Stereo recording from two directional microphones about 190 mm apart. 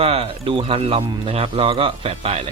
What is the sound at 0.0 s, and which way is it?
Speech, 30° right (ahead or behind).